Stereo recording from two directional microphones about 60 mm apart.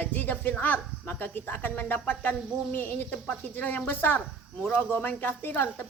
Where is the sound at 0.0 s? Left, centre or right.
Left.